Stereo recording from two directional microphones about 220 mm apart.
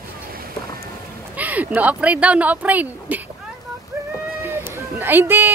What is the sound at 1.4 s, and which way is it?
Speech, 5° right (ahead or behind).